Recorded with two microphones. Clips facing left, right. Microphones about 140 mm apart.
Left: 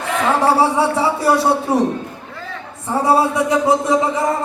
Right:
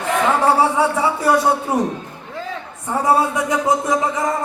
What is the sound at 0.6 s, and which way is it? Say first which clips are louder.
A man's voice: left 1 dB; 30° left (ahead or behind).